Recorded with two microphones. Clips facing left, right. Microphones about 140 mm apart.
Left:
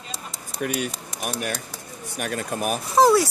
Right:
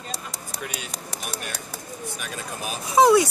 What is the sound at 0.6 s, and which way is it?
Speech, 55° left (ahead or behind).